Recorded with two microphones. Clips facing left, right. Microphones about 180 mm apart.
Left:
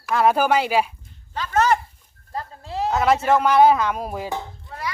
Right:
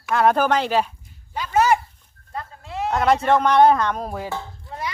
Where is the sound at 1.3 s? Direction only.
10° right (ahead or behind).